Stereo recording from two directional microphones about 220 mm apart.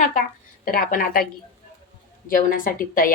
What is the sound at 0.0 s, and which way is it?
A woman's voice, 35° left (ahead or behind).